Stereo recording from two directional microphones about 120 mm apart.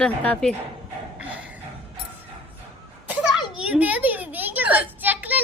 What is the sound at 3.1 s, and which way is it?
Children playing, 10° right (ahead or behind).